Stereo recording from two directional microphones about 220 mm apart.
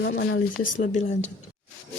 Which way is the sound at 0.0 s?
45° left (ahead or behind).